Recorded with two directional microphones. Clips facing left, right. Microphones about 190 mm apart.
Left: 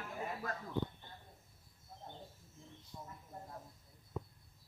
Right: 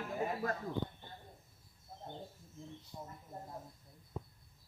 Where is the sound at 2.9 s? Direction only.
25° right (ahead or behind).